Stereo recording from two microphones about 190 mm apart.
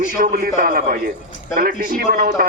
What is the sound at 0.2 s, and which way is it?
A man's voice, 50° right (ahead or behind).